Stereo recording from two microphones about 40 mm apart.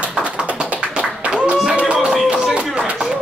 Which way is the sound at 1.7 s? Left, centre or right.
Right.